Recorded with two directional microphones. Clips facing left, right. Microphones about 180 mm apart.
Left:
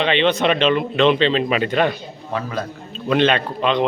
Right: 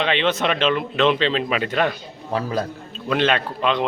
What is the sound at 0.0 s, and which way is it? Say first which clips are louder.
A man's voice: left 3 dB; centre (ahead or behind).